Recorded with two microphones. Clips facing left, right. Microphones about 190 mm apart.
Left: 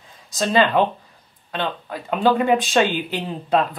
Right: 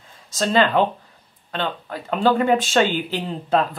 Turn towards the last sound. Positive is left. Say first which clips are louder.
# even
turn(degrees=0)  # may be behind; listen again after turning